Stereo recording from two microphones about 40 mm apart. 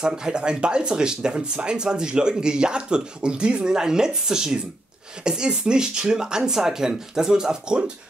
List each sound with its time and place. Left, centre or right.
0.0 s speech: right